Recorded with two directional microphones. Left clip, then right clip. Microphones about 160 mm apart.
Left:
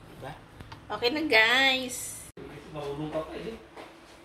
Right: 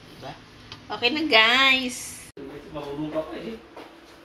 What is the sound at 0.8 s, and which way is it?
A woman's voice, 20° left (ahead or behind).